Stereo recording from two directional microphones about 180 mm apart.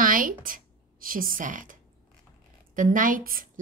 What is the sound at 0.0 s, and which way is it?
A woman's voice, 50° right (ahead or behind).